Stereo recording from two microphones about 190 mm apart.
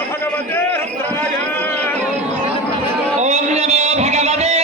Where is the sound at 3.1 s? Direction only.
35° right (ahead or behind).